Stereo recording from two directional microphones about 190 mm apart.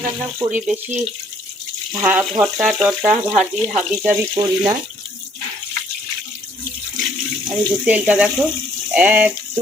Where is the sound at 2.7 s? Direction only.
Centre (ahead or behind).